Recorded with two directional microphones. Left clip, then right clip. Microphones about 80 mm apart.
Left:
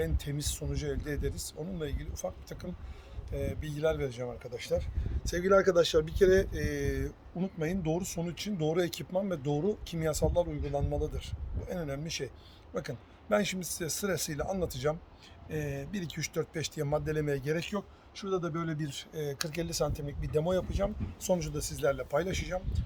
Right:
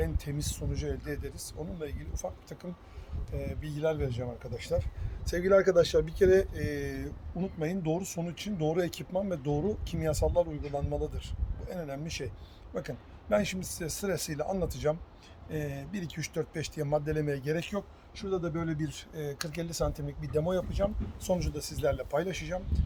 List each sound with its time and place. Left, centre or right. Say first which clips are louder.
0.0 s speech: even; left
4.5 s speech: even; left